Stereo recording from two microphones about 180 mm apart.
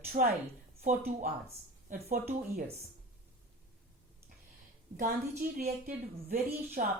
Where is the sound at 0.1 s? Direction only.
50° right (ahead or behind).